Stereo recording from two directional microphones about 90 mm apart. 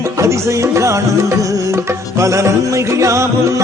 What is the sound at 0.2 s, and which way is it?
Music, 35° right (ahead or behind).